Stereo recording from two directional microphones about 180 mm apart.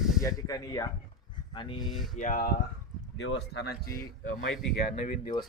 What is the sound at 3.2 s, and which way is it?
Speech, 75° left (ahead or behind).